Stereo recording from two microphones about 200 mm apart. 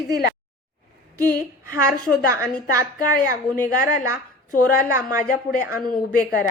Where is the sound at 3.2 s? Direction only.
40° left (ahead or behind).